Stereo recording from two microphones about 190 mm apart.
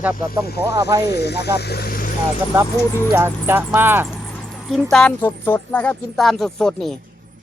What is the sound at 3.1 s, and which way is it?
Speech, 10° right (ahead or behind).